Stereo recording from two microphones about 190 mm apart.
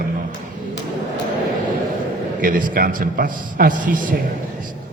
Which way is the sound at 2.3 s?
45° right (ahead or behind).